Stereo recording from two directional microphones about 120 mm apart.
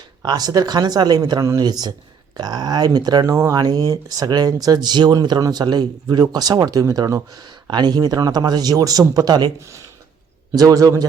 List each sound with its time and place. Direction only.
0.2 s speech: 35° right (ahead or behind)